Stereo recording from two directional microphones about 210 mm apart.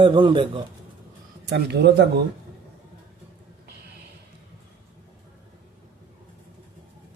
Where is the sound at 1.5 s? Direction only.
55° right (ahead or behind).